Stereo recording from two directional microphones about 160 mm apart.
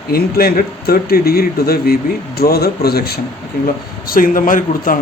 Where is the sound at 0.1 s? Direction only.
70° left (ahead or behind).